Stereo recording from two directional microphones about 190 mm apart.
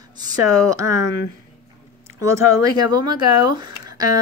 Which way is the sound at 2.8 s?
20° right (ahead or behind).